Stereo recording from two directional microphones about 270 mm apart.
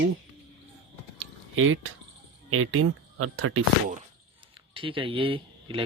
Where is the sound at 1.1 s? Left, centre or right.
Right.